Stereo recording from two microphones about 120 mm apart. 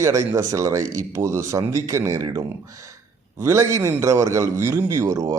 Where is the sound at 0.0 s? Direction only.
25° right (ahead or behind).